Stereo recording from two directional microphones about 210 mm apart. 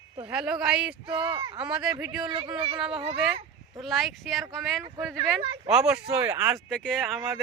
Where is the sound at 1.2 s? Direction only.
20° right (ahead or behind).